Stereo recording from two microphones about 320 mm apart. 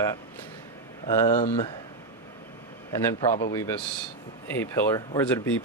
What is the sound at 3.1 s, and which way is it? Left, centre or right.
Speech, centre.